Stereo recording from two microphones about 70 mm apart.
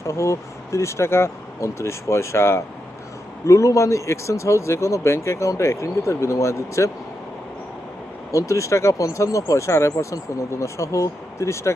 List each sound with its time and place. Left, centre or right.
0.0 s speech: left
8.3 s speech: left